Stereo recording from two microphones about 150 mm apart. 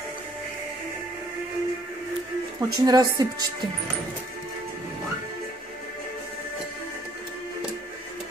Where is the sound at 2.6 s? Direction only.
25° right (ahead or behind).